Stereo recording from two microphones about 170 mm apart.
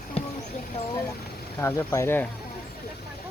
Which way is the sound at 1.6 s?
15° left (ahead or behind).